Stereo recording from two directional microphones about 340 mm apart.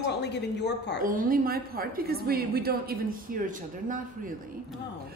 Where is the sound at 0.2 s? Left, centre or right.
Left.